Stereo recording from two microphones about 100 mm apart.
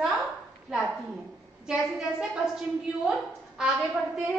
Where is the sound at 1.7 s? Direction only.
5° right (ahead or behind).